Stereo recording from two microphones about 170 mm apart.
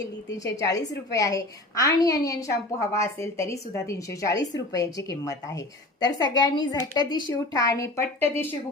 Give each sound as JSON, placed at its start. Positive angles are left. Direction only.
{"t": 1.1, "sound": "a woman's voice", "side_deg": 20}